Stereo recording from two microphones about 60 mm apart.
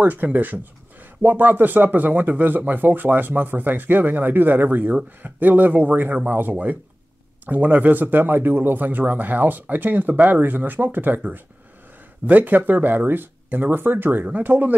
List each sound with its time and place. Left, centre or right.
0.0 s a man's voice: right